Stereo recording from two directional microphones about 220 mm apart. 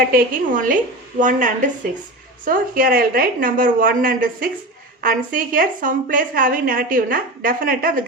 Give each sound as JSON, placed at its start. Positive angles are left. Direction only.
{"t": 0.1, "sound": "a woman's voice", "side_deg": -40}